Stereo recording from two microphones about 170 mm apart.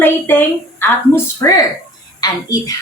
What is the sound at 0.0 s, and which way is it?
A woman's voice, 10° left (ahead or behind).